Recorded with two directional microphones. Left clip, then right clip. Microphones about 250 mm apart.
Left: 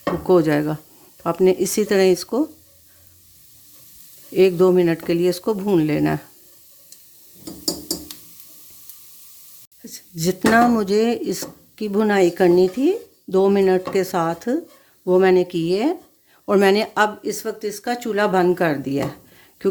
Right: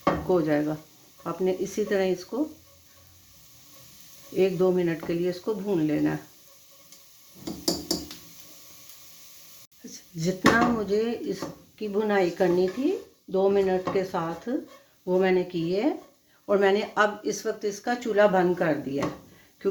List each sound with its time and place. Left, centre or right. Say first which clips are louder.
0.3 s speech: left 12 dB; left
4.4 s speech: left 8 dB; left
9.9 s a sound: left 7 dB; left
10.8 s speech: left 8 dB; left